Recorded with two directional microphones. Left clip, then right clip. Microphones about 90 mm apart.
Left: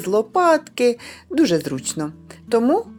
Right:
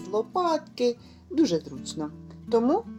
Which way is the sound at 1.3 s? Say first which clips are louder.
Left 6 dB; 55° left (ahead or behind).